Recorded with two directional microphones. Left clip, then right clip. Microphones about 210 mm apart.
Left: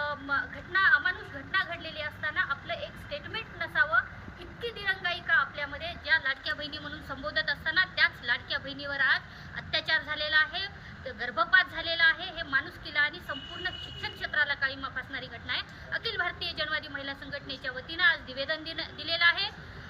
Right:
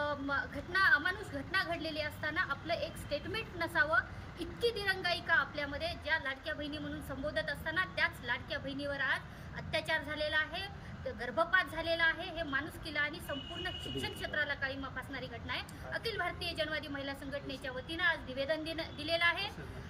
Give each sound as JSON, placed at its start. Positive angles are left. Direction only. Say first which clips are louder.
{"t": 0.0, "sound": "a woman's voice", "louder": "left 4 dB", "side_deg": -15}